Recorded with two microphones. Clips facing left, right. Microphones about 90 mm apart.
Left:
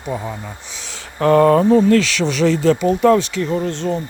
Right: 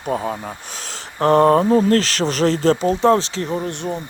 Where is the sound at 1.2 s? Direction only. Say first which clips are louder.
Left 1 dB; 35° right (ahead or behind).